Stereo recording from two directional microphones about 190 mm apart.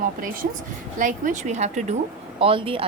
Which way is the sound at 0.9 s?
45° right (ahead or behind).